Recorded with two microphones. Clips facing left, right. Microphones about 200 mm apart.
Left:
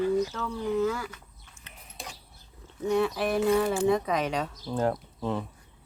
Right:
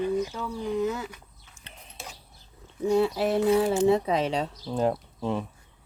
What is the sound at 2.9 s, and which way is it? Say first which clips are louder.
Speech: right 3 dB; 30° right (ahead or behind).